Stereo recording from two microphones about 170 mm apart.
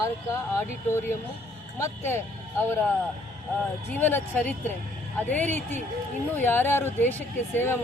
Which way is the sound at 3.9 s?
10° left (ahead or behind).